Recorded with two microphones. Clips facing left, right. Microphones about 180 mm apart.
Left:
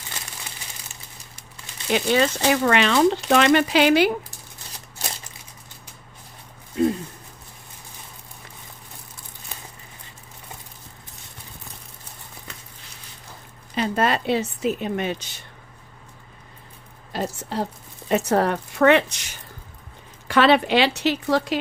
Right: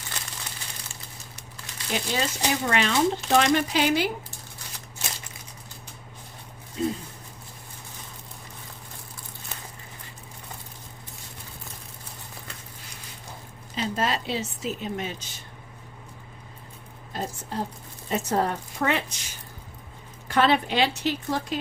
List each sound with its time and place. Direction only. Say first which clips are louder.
1.9 s speech: left 8 dB; 70° left (ahead or behind)
6.8 s a woman's voice: left 7 dB; 60° left (ahead or behind)
13.7 s a woman's voice: left 5 dB; 60° left (ahead or behind)
17.1 s speech: left 5 dB; 75° left (ahead or behind)